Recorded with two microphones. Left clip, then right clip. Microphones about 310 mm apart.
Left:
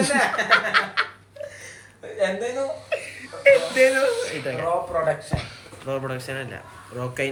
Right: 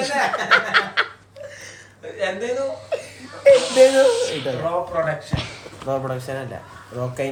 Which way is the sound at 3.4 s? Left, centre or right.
Centre.